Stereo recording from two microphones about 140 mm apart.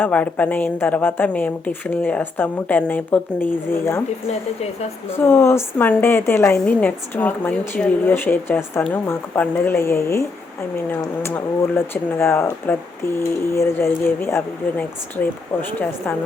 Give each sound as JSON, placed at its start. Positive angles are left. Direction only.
{"t": 0.0, "sound": "a woman's voice", "side_deg": 10}
{"t": 4.3, "sound": "a woman's voice", "side_deg": 50}
{"t": 5.1, "sound": "a woman's voice", "side_deg": 15}